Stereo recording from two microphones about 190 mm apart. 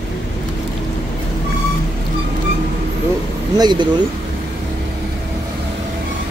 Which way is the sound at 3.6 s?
25° right (ahead or behind).